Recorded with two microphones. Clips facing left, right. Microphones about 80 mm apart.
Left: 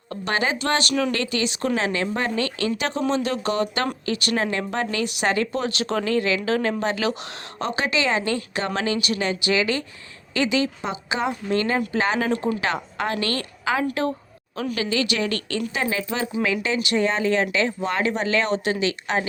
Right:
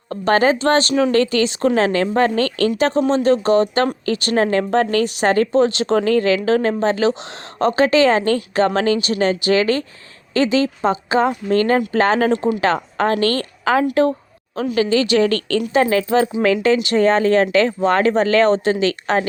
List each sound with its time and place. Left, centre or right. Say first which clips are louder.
0.1 s speech: right 9 dB; right
1.1 s speech: right 9 dB; right